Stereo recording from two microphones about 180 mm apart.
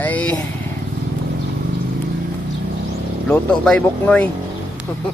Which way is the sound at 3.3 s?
5° left (ahead or behind).